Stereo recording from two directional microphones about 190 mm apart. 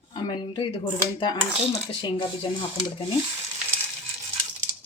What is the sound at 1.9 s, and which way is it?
Speech, 25° left (ahead or behind).